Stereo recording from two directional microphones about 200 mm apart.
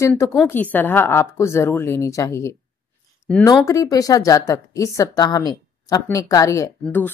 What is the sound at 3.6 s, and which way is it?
A woman's voice, 15° left (ahead or behind).